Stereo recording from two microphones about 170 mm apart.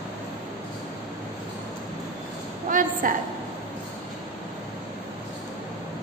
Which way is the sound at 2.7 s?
50° right (ahead or behind).